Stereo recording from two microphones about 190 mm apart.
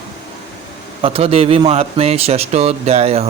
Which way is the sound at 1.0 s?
30° right (ahead or behind).